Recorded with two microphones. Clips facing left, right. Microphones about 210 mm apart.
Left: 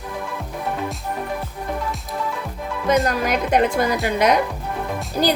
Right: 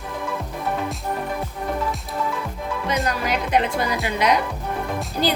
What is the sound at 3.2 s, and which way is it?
Speech, 45° left (ahead or behind).